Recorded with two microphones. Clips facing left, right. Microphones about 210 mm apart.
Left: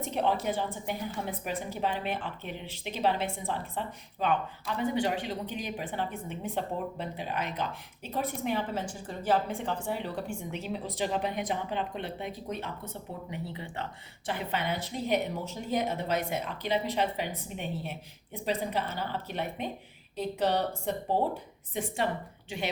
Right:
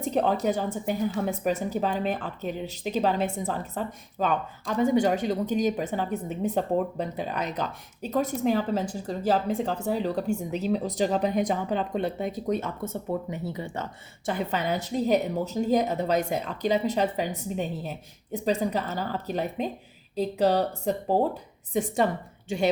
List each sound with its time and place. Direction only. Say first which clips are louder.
0.1 s speech: right 6 dB; 40° right (ahead or behind)
14.3 s speech: right 5 dB; 40° right (ahead or behind)